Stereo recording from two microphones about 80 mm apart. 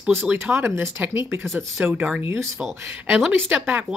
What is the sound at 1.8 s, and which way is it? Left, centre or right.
Speech, centre.